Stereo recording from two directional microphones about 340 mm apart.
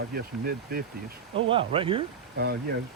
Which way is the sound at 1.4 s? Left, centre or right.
Centre.